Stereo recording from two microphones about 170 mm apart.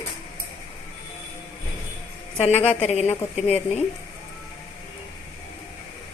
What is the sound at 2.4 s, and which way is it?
Speech, 35° left (ahead or behind).